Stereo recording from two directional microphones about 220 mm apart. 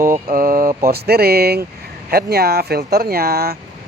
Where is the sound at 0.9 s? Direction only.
45° right (ahead or behind).